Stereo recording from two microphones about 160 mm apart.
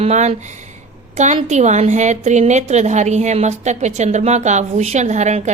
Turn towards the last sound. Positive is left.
turn(degrees=-45)  # may be behind; listen again after turning